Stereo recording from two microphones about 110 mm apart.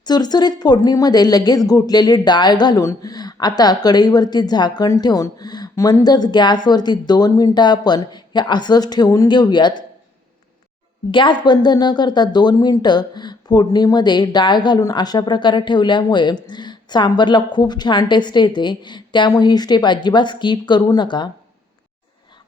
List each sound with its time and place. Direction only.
0.0 s speech: 40° left (ahead or behind)
11.1 s speech: 45° left (ahead or behind)